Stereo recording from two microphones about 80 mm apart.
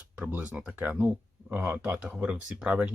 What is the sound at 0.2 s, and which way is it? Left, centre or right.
Speech, centre.